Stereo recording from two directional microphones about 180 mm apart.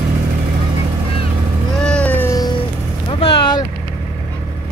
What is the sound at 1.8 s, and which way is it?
Cat, 5° left (ahead or behind).